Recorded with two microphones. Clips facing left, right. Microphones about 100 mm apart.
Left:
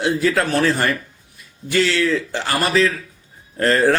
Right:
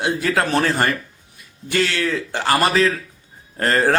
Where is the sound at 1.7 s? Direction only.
50° right (ahead or behind).